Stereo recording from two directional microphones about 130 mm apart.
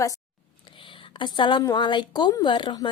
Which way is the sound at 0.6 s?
40° left (ahead or behind).